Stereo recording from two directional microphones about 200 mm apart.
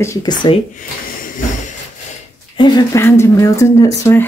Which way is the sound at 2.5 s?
20° left (ahead or behind).